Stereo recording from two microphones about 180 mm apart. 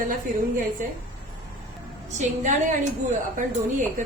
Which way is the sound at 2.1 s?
45° right (ahead or behind).